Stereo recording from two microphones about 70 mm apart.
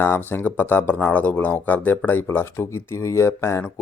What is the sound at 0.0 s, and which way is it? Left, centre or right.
Speech, left.